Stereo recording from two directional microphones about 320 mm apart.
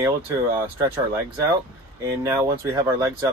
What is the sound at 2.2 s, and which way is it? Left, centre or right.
Speech, centre.